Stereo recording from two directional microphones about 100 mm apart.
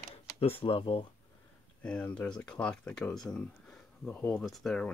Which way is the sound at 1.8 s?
10° left (ahead or behind).